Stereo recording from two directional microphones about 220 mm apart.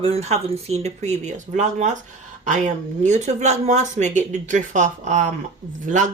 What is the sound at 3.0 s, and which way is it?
Speech, 30° right (ahead or behind).